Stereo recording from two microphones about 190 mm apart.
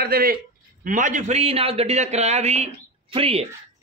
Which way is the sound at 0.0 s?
50° right (ahead or behind).